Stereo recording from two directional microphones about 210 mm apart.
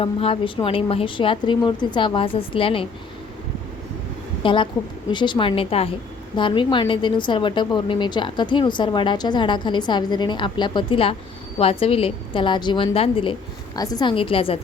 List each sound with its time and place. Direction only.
0.0 s a woman's voice: 25° left (ahead or behind)
4.4 s a woman's voice: 25° left (ahead or behind)